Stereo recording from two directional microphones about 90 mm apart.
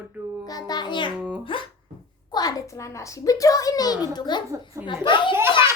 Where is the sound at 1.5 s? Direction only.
70° left (ahead or behind).